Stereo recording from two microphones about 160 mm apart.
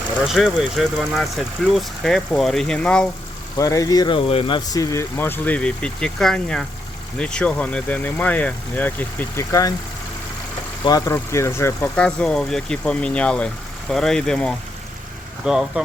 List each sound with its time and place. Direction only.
0.3 s speech: centre (ahead or behind)
3.6 s speech: 20° left (ahead or behind)
10.8 s speech: 20° left (ahead or behind)
11.9 s speech: 5° left (ahead or behind)